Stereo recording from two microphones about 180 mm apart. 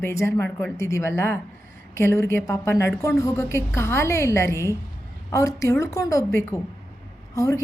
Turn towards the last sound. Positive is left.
turn(degrees=15)  # may be behind; listen again after turning